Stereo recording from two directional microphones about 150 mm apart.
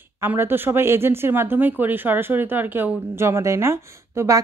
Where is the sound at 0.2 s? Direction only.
15° right (ahead or behind).